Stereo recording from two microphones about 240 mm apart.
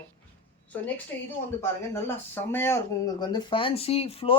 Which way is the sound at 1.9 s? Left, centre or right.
Centre.